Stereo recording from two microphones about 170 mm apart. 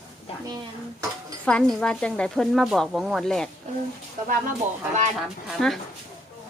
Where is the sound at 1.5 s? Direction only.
5° left (ahead or behind).